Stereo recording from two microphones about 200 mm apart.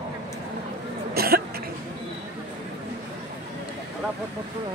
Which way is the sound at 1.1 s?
50° right (ahead or behind).